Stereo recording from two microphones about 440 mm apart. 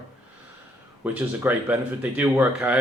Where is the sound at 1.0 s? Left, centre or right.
Centre.